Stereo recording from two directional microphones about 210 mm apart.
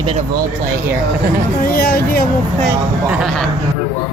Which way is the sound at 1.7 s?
45° left (ahead or behind).